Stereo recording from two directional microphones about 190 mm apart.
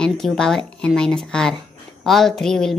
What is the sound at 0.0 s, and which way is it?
Speech, 5° left (ahead or behind).